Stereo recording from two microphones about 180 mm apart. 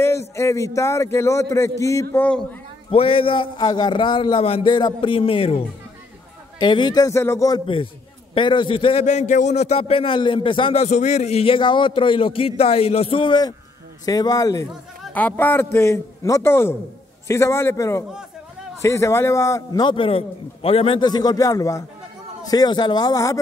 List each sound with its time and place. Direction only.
0.0 s a man's voice: 15° left (ahead or behind)
2.9 s a man's voice: 30° left (ahead or behind)
6.6 s a man's voice: 25° left (ahead or behind)